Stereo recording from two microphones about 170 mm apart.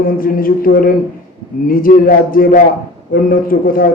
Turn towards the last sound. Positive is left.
turn(degrees=55)  # may be behind; listen again after turning